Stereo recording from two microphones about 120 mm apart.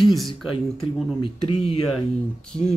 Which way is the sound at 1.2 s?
55° left (ahead or behind).